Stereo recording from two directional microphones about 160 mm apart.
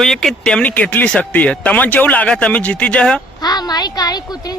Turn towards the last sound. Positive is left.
turn(degrees=25)  # may be behind; listen again after turning